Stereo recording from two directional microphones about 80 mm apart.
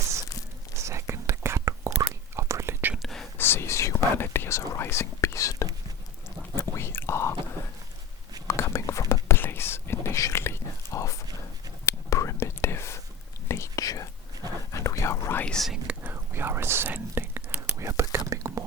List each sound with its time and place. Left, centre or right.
0.8 s whispering: right
3.0 s whispering: centre
3.3 s whispering: left
8.4 s whispering: left
14.7 s a sound: left
15.4 s whispering: centre
16.0 s whispering: right
17.7 s whispering: right